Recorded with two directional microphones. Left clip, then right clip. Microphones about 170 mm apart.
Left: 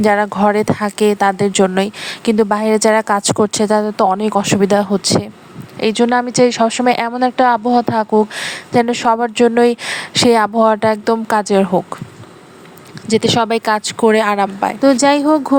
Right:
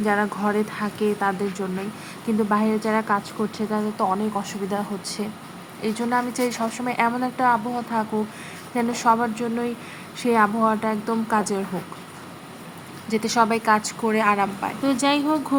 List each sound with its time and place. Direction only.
0.0 s speech: 65° left (ahead or behind); by 3.8 s 90° left
3.9 s speech: 60° left (ahead or behind)
13.1 s speech: 50° left (ahead or behind); by 14.8 s 70° left (ahead or behind)
14.8 s speech: 40° left (ahead or behind)